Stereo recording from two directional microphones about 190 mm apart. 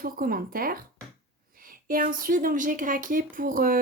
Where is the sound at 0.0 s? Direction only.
50° right (ahead or behind).